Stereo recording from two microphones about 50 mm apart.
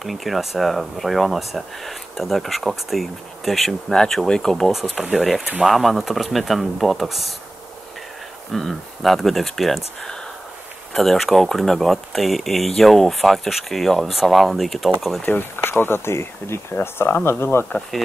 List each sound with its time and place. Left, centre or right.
0.0 s speech: centre
4.7 s speech: centre
8.5 s speech: centre
10.9 s speech: centre
15.2 s speech: left